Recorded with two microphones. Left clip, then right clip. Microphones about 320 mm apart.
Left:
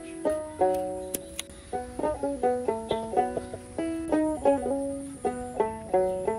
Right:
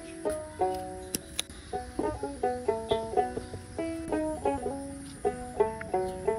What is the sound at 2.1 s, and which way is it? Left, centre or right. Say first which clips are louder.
Music: left 7 dB; left.